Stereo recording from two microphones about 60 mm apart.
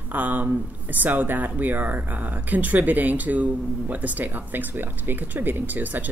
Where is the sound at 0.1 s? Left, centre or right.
Right.